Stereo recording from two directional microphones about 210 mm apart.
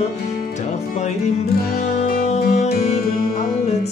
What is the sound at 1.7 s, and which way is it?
Music, 45° left (ahead or behind).